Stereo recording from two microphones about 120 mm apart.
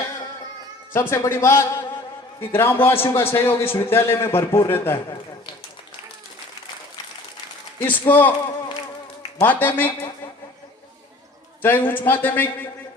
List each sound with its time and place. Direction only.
0.9 s a man's voice: 20° left (ahead or behind)
7.8 s a man's voice: 15° left (ahead or behind)
9.4 s a man's voice: 15° left (ahead or behind)
11.6 s a man's voice: 15° left (ahead or behind)